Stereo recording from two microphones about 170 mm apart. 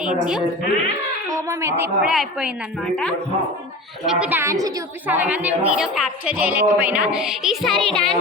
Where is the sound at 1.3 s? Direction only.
20° right (ahead or behind).